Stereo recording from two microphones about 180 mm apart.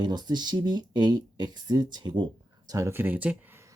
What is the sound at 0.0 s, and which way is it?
Speech, 25° right (ahead or behind).